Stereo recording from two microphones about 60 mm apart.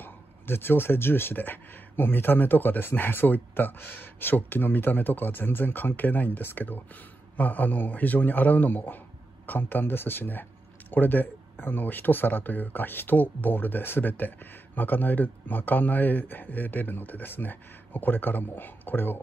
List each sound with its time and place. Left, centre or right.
0.0 s speech: left